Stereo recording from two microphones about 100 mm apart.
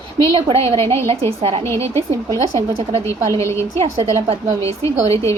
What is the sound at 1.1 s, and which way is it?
Speech, 90° right.